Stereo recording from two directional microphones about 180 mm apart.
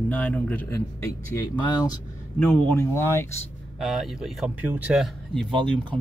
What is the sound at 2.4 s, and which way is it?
Speech, 10° left (ahead or behind).